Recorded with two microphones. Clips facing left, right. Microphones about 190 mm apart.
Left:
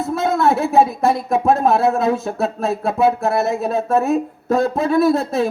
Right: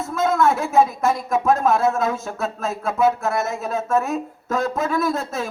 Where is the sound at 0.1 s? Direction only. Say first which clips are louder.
Left 1 dB; 30° left (ahead or behind).